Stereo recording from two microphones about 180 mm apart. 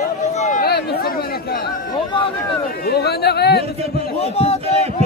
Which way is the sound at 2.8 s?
60° left (ahead or behind).